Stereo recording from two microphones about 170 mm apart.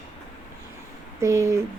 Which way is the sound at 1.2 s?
15° right (ahead or behind).